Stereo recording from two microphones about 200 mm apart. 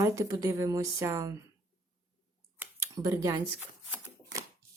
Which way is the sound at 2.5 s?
15° right (ahead or behind).